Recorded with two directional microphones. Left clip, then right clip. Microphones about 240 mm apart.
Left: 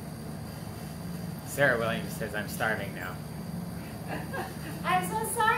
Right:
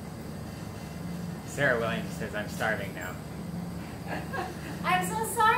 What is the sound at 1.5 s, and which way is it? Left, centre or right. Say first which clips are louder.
Speech: left 1 dB; left.